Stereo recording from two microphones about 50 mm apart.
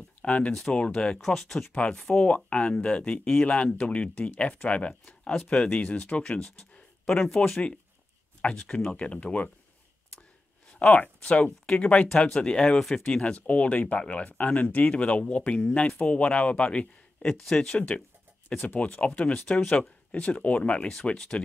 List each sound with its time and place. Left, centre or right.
0.2 s speech: left; by 1.7 s centre
1.8 s speech: left
10.7 s speech: left; by 13.1 s centre
13.1 s speech: left